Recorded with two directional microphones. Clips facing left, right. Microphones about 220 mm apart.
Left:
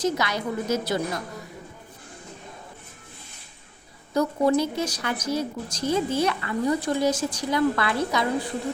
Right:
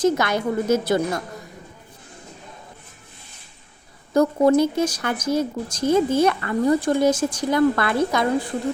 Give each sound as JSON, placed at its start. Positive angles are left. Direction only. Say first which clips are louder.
{"t": 0.0, "sound": "speech", "louder": "right 6 dB", "side_deg": -50}
{"t": 4.1, "sound": "speech", "louder": "right 5 dB", "side_deg": -50}